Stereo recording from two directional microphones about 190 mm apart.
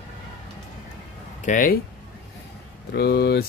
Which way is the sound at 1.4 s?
45° left (ahead or behind).